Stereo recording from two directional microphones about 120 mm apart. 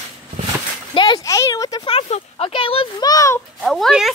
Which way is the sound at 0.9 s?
40° left (ahead or behind).